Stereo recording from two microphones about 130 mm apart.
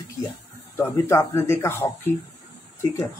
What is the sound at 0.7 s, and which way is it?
Speech, 20° left (ahead or behind).